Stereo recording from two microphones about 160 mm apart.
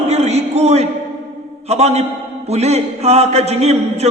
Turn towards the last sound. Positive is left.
turn(degrees=-40)  # may be behind; listen again after turning